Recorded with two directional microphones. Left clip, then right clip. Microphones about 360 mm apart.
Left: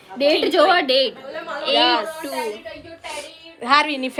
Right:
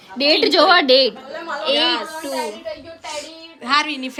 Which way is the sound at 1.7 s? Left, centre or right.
Centre.